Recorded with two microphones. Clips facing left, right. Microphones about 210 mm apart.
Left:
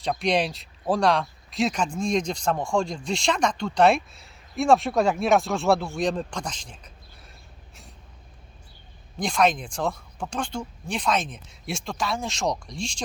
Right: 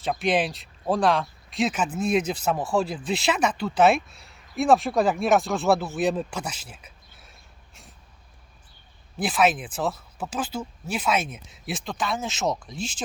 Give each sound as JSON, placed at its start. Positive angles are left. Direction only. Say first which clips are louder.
{"t": 0.0, "sound": "speech", "louder": "even", "side_deg": 0}
{"t": 9.1, "sound": "speech", "louder": "even", "side_deg": -5}